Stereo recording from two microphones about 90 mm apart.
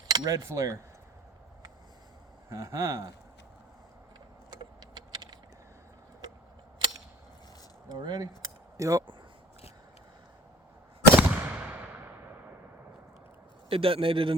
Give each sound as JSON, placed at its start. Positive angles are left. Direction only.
{"t": 0.1, "sound": "speech", "side_deg": -40}
{"t": 2.5, "sound": "speech", "side_deg": -35}
{"t": 4.9, "sound": "a sound", "side_deg": -55}
{"t": 7.9, "sound": "speech", "side_deg": -50}
{"t": 8.8, "sound": "speech", "side_deg": -40}
{"t": 11.2, "sound": "a sound", "side_deg": -10}
{"t": 13.7, "sound": "a man's voice", "side_deg": -90}